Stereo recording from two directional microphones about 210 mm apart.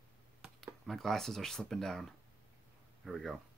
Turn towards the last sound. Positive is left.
turn(degrees=0)  # may be behind; listen again after turning